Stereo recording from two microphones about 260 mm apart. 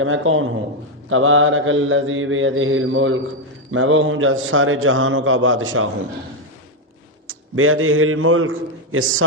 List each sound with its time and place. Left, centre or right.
0.0 s a man's voice: right
7.3 s a man's voice: right